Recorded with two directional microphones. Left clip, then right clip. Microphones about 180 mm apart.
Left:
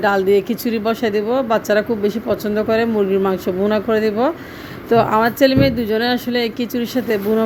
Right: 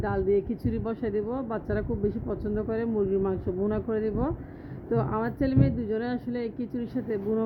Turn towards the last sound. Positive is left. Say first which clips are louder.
# left 12 dB
turn(degrees=15)  # may be behind; listen again after turning